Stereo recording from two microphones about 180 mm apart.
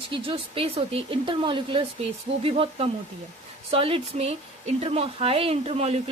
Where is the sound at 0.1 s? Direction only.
30° right (ahead or behind).